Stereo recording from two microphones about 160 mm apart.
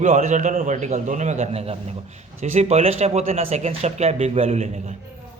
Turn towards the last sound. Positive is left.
turn(degrees=-45)  # may be behind; listen again after turning